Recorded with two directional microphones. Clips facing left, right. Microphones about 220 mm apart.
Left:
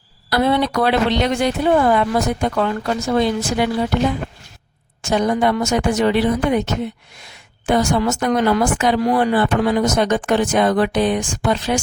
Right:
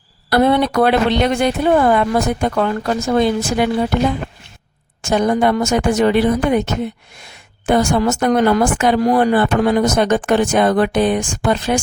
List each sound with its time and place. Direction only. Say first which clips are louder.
0.3 s speech: right 3 dB; 55° right (ahead or behind)
5.0 s speech: right 2 dB; 50° right (ahead or behind)
7.6 s speech: right 2 dB; 50° right (ahead or behind)